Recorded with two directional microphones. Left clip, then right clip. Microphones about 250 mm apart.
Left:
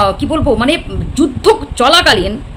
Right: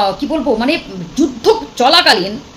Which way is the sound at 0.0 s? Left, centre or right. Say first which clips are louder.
Left 2 dB; centre.